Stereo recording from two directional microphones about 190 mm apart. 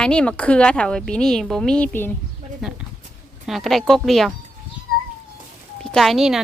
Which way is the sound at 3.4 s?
Centre (ahead or behind).